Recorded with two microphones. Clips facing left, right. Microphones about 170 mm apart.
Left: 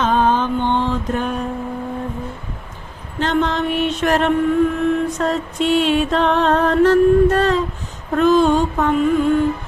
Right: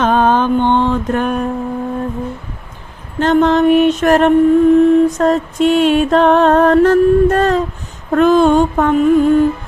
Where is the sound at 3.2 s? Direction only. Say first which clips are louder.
Right 8 dB; 45° right (ahead or behind).